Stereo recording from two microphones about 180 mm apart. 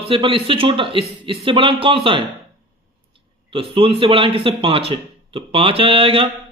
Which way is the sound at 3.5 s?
30° right (ahead or behind).